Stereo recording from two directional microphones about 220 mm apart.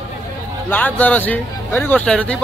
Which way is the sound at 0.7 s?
5° left (ahead or behind).